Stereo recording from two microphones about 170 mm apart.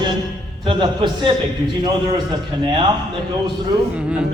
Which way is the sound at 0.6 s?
30° right (ahead or behind).